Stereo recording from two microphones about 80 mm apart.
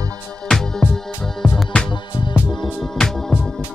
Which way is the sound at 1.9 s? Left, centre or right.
Left.